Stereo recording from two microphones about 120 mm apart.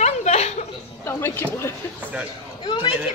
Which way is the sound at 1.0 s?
20° left (ahead or behind).